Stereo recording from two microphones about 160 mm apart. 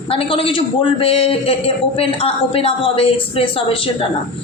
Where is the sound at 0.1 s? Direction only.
35° left (ahead or behind).